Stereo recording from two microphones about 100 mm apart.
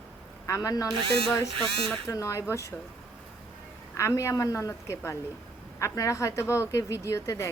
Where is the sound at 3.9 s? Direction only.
30° left (ahead or behind).